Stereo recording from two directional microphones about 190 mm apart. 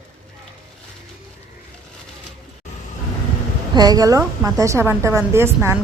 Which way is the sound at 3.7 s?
20° right (ahead or behind).